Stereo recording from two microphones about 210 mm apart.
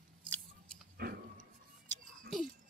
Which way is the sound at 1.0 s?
45° right (ahead or behind).